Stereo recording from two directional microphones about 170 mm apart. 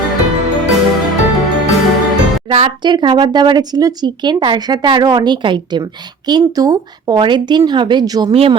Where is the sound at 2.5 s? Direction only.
35° right (ahead or behind).